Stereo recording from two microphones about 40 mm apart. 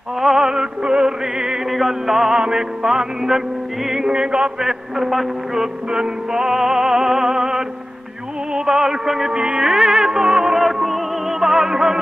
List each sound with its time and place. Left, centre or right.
0.2 s music: centre
4.6 s music: centre
5.9 s music: centre
10.6 s music: centre